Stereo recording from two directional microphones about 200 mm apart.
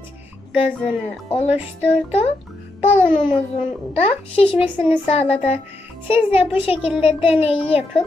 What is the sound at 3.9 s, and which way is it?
Child singing, 30° left (ahead or behind).